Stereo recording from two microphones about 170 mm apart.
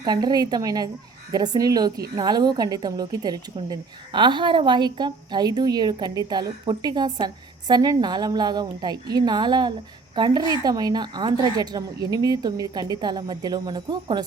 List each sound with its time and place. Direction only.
0.0 s a woman's voice: 25° right (ahead or behind)